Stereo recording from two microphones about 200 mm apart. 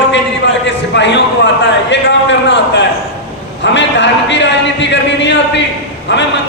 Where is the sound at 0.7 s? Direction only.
65° left (ahead or behind).